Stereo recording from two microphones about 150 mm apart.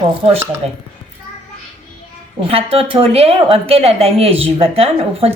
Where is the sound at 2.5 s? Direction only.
40° right (ahead or behind).